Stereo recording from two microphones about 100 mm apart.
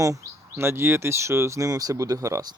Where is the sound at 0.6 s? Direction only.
25° right (ahead or behind).